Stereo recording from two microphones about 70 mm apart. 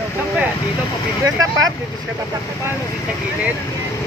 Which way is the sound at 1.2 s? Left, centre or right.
Right.